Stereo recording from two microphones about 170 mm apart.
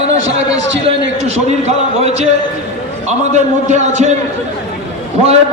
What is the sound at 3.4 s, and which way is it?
Speech, 45° right (ahead or behind).